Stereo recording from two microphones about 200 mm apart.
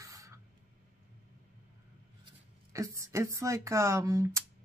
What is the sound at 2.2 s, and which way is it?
Speech, 15° right (ahead or behind).